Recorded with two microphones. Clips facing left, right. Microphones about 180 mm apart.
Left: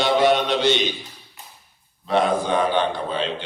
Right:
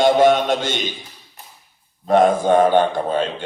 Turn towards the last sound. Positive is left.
turn(degrees=-45)  # may be behind; listen again after turning